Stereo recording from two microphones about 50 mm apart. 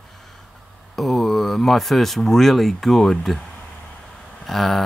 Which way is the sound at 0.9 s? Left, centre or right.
Centre.